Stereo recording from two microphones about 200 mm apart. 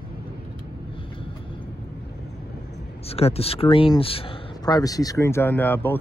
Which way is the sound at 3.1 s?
30° left (ahead or behind).